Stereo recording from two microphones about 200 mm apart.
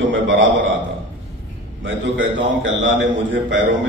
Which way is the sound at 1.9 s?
70° right (ahead or behind).